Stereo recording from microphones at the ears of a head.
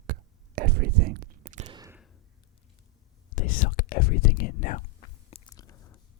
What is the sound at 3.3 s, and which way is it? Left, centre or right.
Whispering, left.